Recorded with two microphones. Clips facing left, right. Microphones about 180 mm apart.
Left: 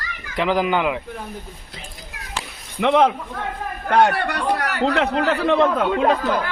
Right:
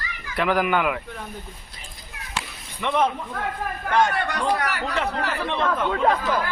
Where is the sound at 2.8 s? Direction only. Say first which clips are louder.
Left 6 dB; 80° left.